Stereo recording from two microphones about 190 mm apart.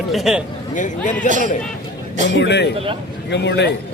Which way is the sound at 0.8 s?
40° left (ahead or behind).